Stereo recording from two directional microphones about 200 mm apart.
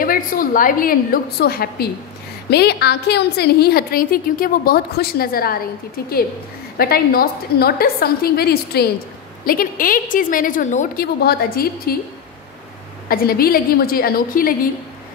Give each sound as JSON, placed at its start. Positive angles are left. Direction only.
{"t": 0.0, "sound": "a woman's voice", "side_deg": 45}
{"t": 6.8, "sound": "a woman's voice", "side_deg": 50}
{"t": 13.1, "sound": "a woman's voice", "side_deg": 50}